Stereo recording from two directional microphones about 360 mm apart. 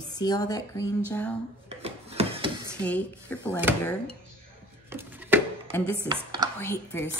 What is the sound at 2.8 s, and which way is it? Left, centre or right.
Speech, centre.